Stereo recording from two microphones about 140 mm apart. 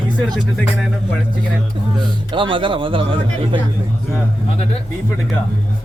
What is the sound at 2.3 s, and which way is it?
Speech, 35° right (ahead or behind).